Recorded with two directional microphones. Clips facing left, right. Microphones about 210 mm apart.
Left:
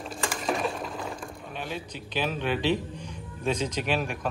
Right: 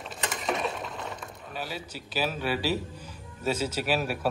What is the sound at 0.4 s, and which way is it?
Stir, centre (ahead or behind).